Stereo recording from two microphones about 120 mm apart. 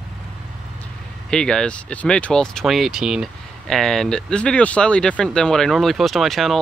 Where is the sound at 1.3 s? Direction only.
5° left (ahead or behind).